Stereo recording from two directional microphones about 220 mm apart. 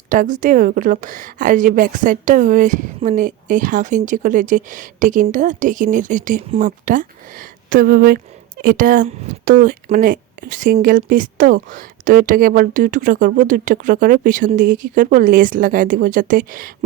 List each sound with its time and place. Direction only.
0.1 s a woman's voice: 35° right (ahead or behind)